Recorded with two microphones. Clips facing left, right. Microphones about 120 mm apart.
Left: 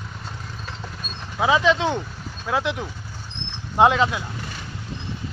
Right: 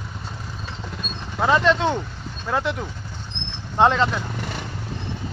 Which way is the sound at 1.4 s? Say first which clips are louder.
Even; 5° left (ahead or behind).